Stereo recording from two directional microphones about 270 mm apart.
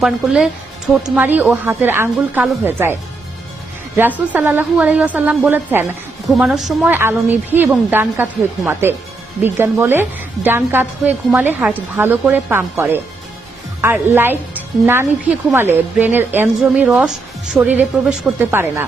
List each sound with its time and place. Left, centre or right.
0.0 s a woman's voice: centre